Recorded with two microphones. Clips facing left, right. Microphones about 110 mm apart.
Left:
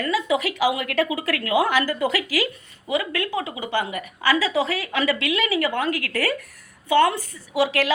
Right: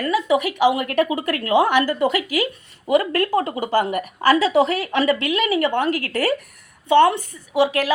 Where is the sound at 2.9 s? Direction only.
40° right (ahead or behind).